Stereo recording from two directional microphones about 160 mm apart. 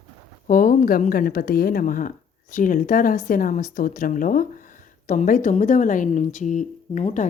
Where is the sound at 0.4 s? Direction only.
55° left (ahead or behind).